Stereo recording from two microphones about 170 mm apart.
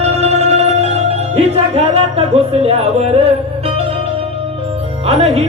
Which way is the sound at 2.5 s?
35° right (ahead or behind).